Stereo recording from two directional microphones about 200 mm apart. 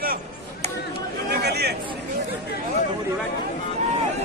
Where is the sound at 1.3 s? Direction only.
55° right (ahead or behind).